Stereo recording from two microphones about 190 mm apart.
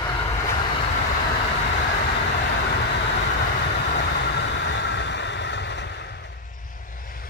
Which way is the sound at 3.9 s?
65° left (ahead or behind).